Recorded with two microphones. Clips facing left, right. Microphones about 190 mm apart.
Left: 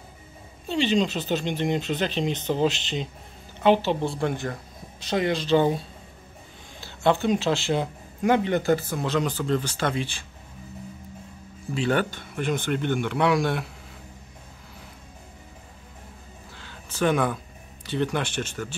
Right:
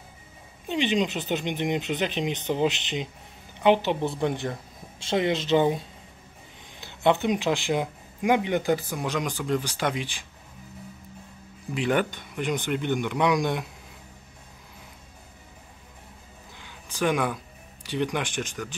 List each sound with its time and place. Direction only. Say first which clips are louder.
0.7 s speech: left 2 dB; 15° right (ahead or behind)
6.8 s speech: even; 20° right (ahead or behind)
11.7 s speech: even; 15° right (ahead or behind)
16.5 s a sound: left 2 dB; 15° right (ahead or behind)
17.8 s speech: left 1 dB; 15° right (ahead or behind)